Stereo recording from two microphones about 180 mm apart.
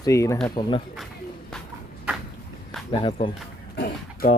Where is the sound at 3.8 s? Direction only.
60° left (ahead or behind).